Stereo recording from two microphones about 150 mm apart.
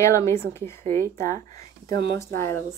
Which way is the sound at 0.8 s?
55° right (ahead or behind).